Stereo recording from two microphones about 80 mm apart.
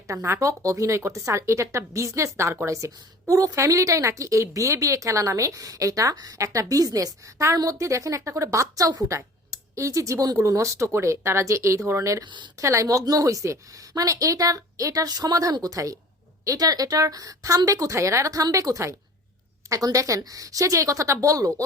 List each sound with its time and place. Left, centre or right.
0.1 s a woman's voice: right
12.2 s speech: right
12.5 s a woman's voice: right